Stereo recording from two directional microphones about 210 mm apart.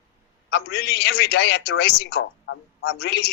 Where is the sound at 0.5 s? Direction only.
50° left (ahead or behind).